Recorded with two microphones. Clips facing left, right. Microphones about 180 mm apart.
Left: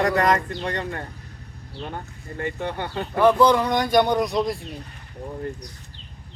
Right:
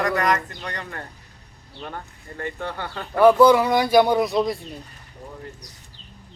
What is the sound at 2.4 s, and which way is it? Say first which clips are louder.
Speech: left 2 dB; 20° left (ahead or behind).